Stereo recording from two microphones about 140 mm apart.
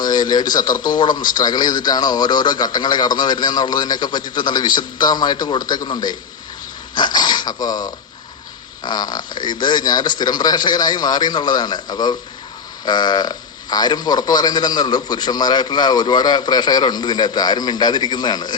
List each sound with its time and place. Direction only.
0.0 s speech: 30° left (ahead or behind)